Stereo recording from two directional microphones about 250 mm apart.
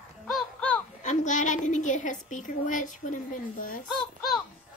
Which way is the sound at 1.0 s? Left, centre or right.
Left.